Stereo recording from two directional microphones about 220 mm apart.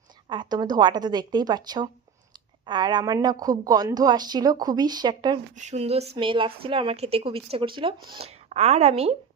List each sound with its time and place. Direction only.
0.3 s a woman's voice: 20° right (ahead or behind)
5.5 s a woman's voice: 30° right (ahead or behind)